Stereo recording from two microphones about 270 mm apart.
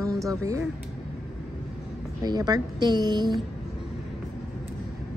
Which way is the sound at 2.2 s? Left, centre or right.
Centre.